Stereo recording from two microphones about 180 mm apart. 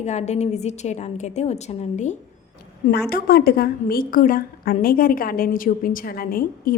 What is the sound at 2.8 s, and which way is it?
A woman's voice, 55° left (ahead or behind).